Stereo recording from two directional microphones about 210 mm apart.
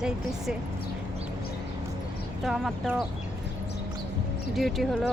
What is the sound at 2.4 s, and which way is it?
Speech, centre (ahead or behind).